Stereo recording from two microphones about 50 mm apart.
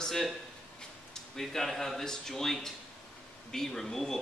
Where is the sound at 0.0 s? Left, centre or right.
Centre.